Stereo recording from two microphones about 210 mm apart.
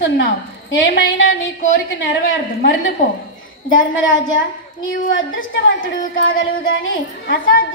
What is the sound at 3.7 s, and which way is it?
A woman's voice, 65° left (ahead or behind).